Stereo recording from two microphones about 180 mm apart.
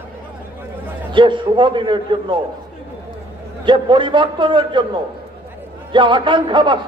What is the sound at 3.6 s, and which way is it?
A man's voice, 25° right (ahead or behind).